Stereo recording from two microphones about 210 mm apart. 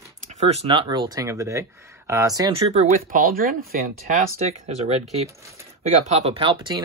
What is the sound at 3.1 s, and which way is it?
Speech, 45° right (ahead or behind).